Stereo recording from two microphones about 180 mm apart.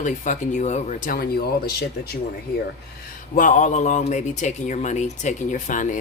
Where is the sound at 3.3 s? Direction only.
45° left (ahead or behind).